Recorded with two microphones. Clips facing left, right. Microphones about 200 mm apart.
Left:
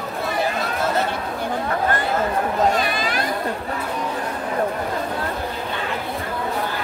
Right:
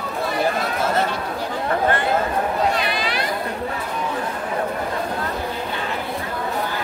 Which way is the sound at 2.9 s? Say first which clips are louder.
Even; 45° left (ahead or behind).